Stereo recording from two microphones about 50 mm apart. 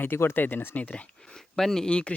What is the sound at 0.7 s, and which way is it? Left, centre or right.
Speech, left.